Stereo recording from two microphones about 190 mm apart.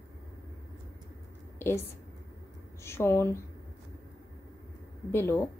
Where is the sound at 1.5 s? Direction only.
10° left (ahead or behind).